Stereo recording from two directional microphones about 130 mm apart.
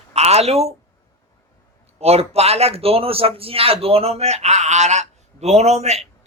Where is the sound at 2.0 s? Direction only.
55° right (ahead or behind).